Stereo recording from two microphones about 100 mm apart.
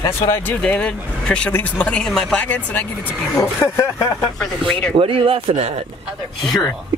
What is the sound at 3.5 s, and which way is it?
Speech, 25° left (ahead or behind).